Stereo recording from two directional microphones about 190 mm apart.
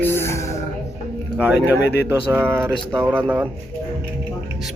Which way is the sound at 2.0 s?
10° right (ahead or behind).